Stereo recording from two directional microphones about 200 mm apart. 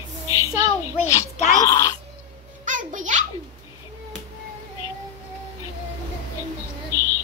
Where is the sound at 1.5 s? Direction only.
20° left (ahead or behind).